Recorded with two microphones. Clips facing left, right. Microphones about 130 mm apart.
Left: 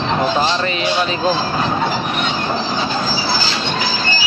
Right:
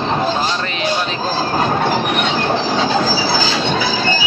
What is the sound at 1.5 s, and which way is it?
Train, 55° right (ahead or behind).